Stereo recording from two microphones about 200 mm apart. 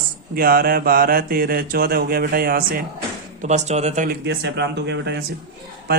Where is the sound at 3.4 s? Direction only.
35° right (ahead or behind).